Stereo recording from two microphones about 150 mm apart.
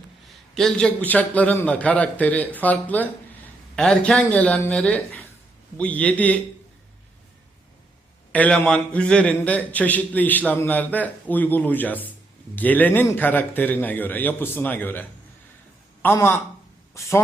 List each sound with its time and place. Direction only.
0.5 s a man's voice: 5° left (ahead or behind)
8.3 s a man's voice: 10° left (ahead or behind)